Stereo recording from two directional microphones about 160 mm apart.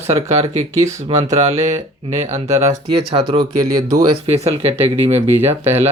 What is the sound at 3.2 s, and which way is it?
Speech, 25° right (ahead or behind).